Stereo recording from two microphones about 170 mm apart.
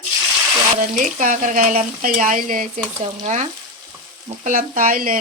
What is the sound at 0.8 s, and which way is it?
Speech, 50° right (ahead or behind).